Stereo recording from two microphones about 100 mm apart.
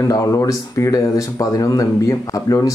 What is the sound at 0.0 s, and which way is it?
Speech, 35° left (ahead or behind).